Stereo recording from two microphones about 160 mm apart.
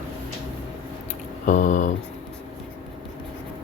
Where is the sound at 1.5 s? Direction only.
50° left (ahead or behind).